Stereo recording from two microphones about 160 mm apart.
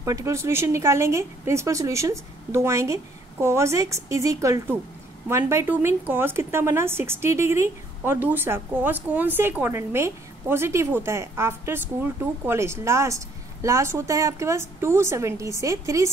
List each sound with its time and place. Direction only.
0.0 s a woman's voice: 20° right (ahead or behind)